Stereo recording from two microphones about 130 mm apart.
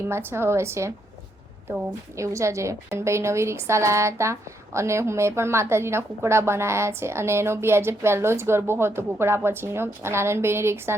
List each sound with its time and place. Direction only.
0.1 s a woman's voice: 20° right (ahead or behind)
2.1 s a woman's voice: 25° right (ahead or behind)